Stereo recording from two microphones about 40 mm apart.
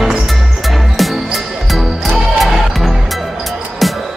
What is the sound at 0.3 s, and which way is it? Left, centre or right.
Music, centre.